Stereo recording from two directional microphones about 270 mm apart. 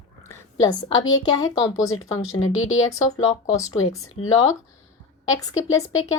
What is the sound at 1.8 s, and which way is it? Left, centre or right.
Speech, left.